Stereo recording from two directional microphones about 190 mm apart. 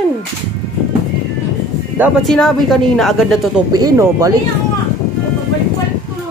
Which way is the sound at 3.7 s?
15° right (ahead or behind).